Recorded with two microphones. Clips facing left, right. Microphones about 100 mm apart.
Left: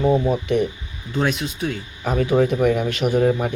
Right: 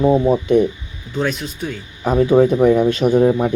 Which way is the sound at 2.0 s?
25° right (ahead or behind).